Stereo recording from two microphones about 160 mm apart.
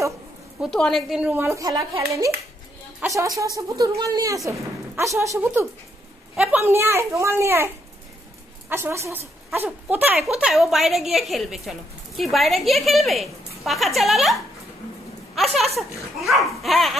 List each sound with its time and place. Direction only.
0.6 s a woman's voice: 5° left (ahead or behind); by 1.8 s 20° right (ahead or behind)
3.0 s a woman's voice: 20° right (ahead or behind); by 16.9 s centre (ahead or behind)